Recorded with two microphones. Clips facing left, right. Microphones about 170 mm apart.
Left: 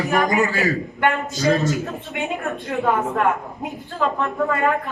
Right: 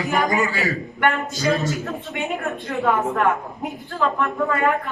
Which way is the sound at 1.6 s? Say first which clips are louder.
Left 2 dB; 20° left (ahead or behind).